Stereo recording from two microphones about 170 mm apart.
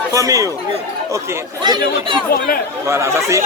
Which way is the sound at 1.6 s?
25° right (ahead or behind).